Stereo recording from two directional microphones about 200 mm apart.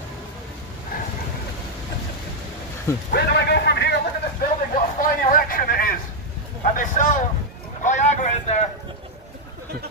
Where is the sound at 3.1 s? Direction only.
55° left (ahead or behind).